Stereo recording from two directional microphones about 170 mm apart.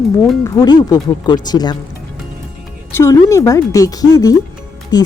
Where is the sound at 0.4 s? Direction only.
25° left (ahead or behind).